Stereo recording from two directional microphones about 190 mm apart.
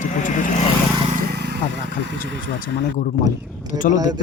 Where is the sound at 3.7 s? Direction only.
45° left (ahead or behind).